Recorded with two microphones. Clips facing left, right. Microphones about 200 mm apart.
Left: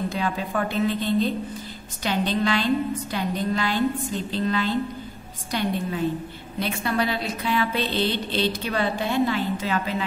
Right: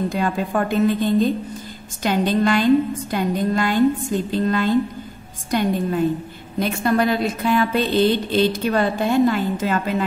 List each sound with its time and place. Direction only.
0.1 s a woman's voice: 50° right (ahead or behind)